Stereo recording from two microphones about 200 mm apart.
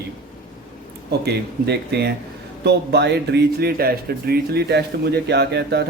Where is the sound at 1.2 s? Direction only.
55° right (ahead or behind).